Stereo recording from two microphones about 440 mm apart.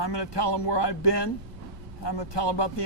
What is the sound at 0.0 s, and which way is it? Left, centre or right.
A man's voice, left.